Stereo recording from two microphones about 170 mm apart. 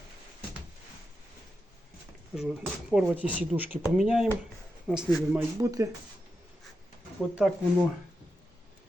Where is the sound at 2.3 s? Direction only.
Centre (ahead or behind).